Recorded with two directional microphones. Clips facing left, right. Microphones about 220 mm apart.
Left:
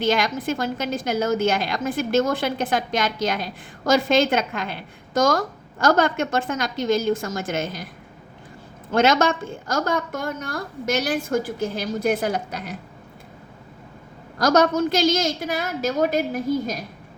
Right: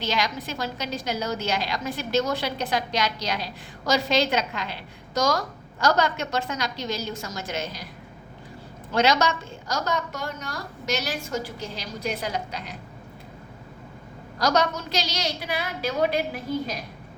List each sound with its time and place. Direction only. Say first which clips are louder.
0.0 s a woman's voice: left 6 dB; 50° left (ahead or behind)
8.9 s a woman's voice: left 4 dB; 50° left (ahead or behind)
14.3 s a woman's voice: left 6 dB; 50° left (ahead or behind)